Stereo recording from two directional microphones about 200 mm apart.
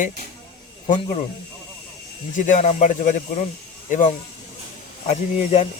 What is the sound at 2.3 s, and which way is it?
Speech, 40° left (ahead or behind).